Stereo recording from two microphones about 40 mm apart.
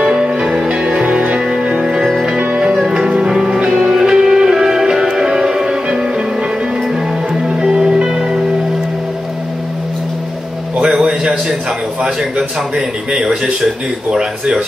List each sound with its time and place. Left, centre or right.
0.0 s music: right
2.2 s music: right
7.4 s music: centre
10.8 s a sound: centre
12.0 s a man's voice: centre